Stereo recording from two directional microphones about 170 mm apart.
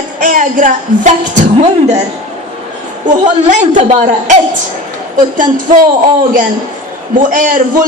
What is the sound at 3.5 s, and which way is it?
Speech, 45° right (ahead or behind).